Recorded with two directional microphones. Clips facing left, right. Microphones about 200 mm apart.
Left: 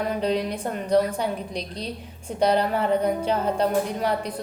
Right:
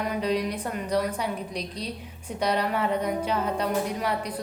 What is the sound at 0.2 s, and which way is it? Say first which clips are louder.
A woman's voice: left 2 dB; 30° left (ahead or behind).